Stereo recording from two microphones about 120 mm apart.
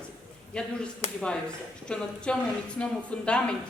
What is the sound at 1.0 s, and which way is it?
Speech, 60° left (ahead or behind).